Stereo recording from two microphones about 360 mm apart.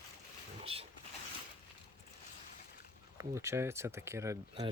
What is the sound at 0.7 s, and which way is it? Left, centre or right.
Speech, centre.